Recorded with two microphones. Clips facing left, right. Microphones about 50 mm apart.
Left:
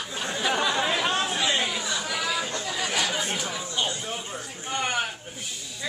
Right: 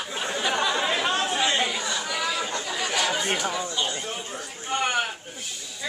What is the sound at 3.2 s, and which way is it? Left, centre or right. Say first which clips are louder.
Chatter: right 4 dB; right.